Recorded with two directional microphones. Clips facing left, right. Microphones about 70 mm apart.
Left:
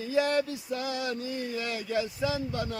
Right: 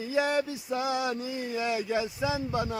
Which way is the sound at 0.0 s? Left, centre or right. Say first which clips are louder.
Left 1 dB; centre.